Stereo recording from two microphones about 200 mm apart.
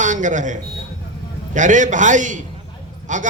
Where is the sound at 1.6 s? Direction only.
40° right (ahead or behind).